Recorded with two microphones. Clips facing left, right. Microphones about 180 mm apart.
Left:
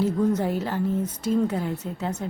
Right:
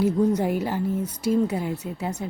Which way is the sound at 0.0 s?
15° right (ahead or behind).